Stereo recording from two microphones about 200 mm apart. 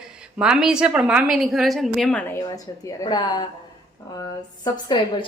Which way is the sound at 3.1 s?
20° left (ahead or behind).